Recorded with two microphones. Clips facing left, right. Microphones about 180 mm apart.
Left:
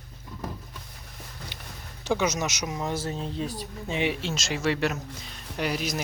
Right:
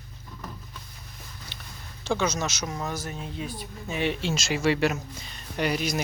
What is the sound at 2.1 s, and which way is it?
Speech, 15° left (ahead or behind).